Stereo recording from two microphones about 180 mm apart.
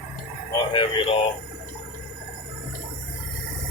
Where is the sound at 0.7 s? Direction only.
30° left (ahead or behind).